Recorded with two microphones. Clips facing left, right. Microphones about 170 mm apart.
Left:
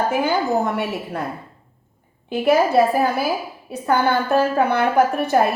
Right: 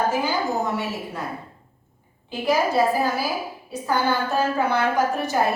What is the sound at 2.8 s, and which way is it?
A woman's voice, 60° left (ahead or behind).